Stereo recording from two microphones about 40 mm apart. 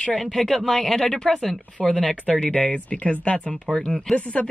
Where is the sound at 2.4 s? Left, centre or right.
Left.